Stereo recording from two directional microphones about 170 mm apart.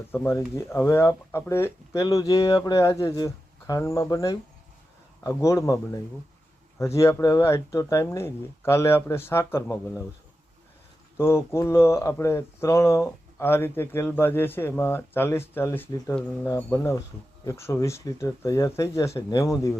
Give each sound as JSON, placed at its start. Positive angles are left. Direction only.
{"t": 0.1, "sound": "speech", "side_deg": 15}
{"t": 11.2, "sound": "speech", "side_deg": 15}